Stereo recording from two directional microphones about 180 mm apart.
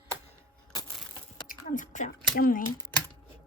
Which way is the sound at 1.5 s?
45° left (ahead or behind).